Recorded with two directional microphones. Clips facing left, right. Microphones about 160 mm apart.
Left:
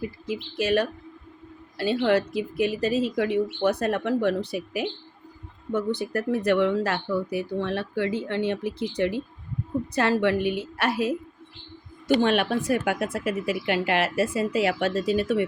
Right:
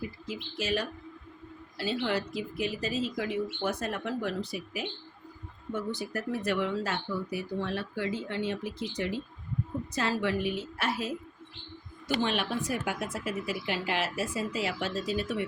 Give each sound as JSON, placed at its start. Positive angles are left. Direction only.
{"t": 0.5, "sound": "speech", "side_deg": 60}
{"t": 12.2, "sound": "speech", "side_deg": 60}